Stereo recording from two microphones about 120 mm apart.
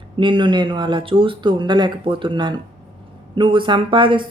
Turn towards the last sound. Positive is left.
turn(degrees=-45)  # may be behind; listen again after turning